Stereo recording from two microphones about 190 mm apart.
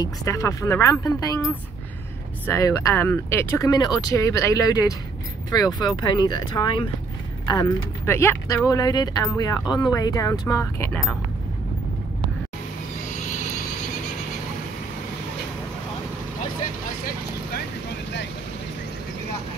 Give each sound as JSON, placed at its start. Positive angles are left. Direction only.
{"t": 0.0, "sound": "speech", "side_deg": 15}